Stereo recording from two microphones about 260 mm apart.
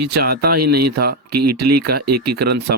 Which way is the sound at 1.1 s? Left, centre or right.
Right.